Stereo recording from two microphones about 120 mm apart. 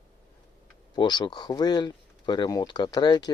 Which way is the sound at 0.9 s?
40° left (ahead or behind).